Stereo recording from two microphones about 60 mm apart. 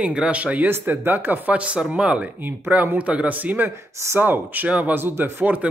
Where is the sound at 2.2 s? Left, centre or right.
Right.